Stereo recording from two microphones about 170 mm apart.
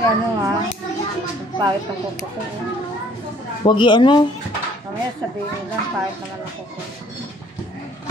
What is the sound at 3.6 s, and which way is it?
Speech, 30° left (ahead or behind).